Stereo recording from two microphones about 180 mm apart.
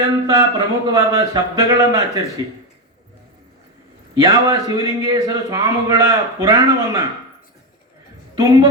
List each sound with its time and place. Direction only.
0.0 s a man's voice: 20° right (ahead or behind)
4.1 s a man's voice: 20° right (ahead or behind)